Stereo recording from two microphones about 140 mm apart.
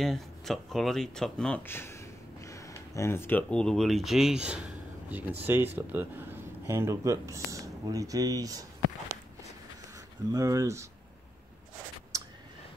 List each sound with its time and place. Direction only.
0.0 s speech: centre (ahead or behind); by 8.6 s 25° right (ahead or behind)
9.9 s speech: 25° right (ahead or behind)